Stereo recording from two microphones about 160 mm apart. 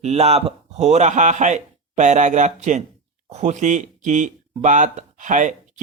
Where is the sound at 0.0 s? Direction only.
40° right (ahead or behind).